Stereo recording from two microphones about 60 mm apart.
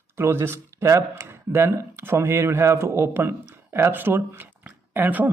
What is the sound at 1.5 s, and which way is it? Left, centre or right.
A man's voice, right.